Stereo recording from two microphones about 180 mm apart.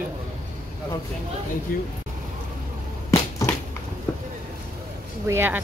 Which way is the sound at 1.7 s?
50° left (ahead or behind).